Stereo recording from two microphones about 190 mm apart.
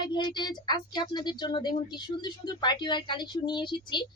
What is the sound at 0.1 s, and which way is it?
A woman's voice, 25° left (ahead or behind).